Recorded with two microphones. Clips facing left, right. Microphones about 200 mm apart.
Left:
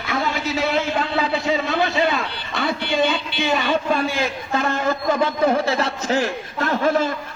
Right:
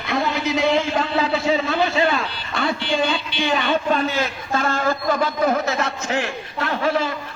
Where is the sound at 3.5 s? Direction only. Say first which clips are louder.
Even; 10° left (ahead or behind); by 7.1 s 45° left (ahead or behind).